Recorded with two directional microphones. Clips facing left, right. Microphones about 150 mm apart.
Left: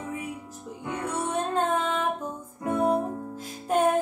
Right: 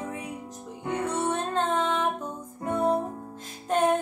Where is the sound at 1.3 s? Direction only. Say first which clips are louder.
Left 1 dB; 10° left (ahead or behind).